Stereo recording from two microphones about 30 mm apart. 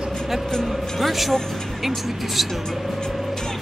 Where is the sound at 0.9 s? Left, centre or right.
Centre.